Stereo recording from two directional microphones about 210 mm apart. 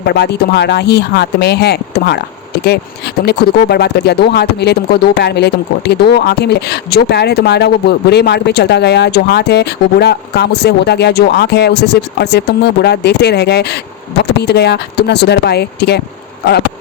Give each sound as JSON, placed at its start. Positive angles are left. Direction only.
{"t": 0.0, "sound": "speech", "side_deg": 50}
{"t": 3.2, "sound": "speech", "side_deg": 50}